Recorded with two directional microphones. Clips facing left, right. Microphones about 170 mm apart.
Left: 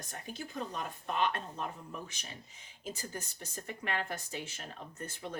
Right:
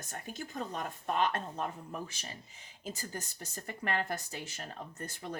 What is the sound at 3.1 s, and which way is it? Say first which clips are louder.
Speech: right 1 dB; 40° right (ahead or behind).